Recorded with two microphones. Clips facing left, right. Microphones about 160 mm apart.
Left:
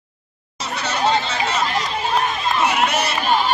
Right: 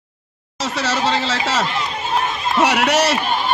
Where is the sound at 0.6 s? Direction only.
90° right.